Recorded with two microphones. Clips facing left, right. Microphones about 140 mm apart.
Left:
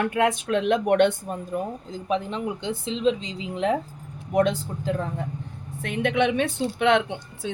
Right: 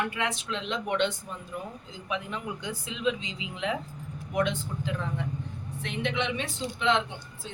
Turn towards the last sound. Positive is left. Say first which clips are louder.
# left 5 dB
turn(degrees=60)  # may be behind; listen again after turning